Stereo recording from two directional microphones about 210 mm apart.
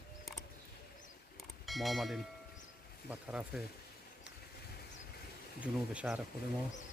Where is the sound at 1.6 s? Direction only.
Centre (ahead or behind).